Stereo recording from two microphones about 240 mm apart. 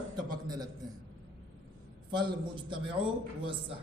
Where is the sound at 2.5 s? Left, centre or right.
Right.